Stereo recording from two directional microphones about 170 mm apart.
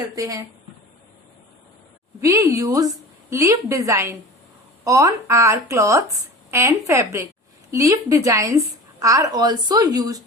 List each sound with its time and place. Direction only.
0.2 s a woman's voice: 20° right (ahead or behind)
2.2 s a woman's voice: 15° right (ahead or behind)